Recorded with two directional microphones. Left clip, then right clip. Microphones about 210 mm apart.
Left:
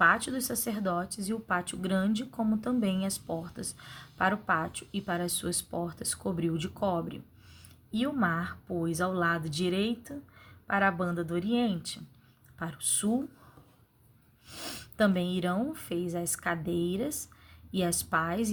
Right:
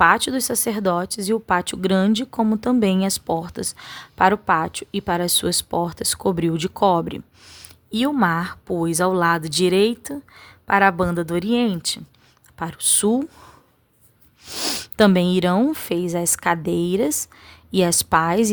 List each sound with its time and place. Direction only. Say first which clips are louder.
0.0 s speech: right 9 dB; 50° right (ahead or behind)
14.4 s speech: right 16 dB; 55° right (ahead or behind)